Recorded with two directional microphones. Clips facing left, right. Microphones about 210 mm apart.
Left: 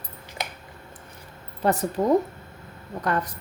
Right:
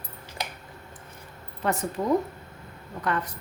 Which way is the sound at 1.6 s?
35° left (ahead or behind).